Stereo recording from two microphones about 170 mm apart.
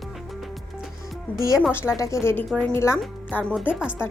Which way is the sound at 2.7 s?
15° left (ahead or behind).